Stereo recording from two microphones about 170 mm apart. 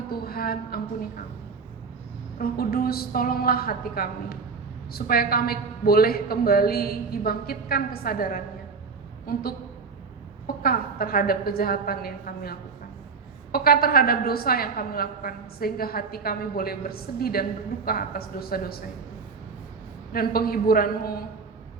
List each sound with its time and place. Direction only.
0.1 s a sound: 65° left (ahead or behind)
2.4 s a woman's voice: 60° left (ahead or behind)
20.1 s a woman's voice: 60° left (ahead or behind)